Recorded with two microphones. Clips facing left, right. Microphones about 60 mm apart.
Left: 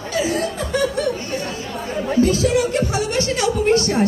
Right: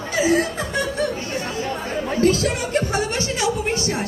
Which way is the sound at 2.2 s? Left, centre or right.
Right.